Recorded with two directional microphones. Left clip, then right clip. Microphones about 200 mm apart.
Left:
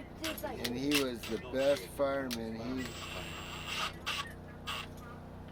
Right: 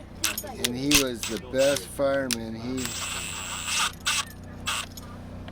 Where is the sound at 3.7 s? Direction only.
55° right (ahead or behind).